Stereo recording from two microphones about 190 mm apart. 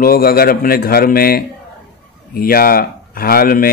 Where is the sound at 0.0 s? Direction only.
50° left (ahead or behind).